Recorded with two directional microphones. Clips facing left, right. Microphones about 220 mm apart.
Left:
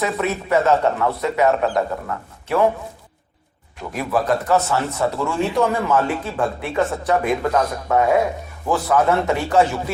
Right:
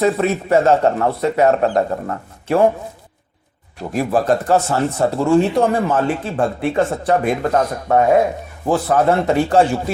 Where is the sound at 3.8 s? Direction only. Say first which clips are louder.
Right 4 dB; 30° right (ahead or behind).